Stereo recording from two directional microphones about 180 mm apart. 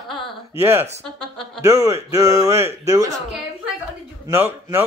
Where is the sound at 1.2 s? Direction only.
Centre (ahead or behind).